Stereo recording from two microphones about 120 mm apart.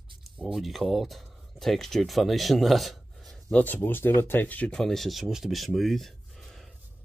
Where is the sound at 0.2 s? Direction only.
Centre (ahead or behind).